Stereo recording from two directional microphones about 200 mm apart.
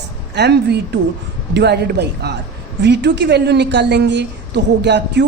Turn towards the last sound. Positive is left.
turn(degrees=-60)  # may be behind; listen again after turning